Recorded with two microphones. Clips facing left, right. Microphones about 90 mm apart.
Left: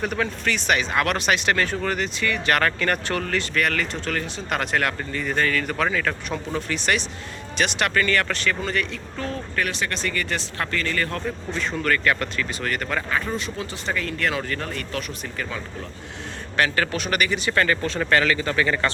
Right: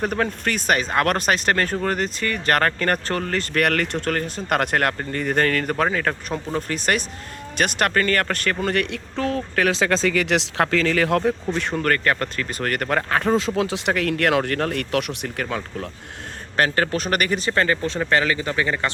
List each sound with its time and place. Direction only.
0.0 s speech: 40° right (ahead or behind)
3.5 s speech: 60° right (ahead or behind)
16.6 s speech: 40° right (ahead or behind)
17.5 s speech: 25° right (ahead or behind)